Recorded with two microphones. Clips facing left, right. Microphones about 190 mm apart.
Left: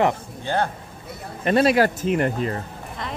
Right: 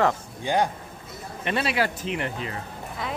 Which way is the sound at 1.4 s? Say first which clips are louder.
Left 8 dB; 40° left (ahead or behind).